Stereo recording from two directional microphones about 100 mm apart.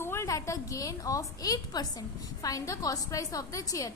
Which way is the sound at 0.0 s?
25° left (ahead or behind).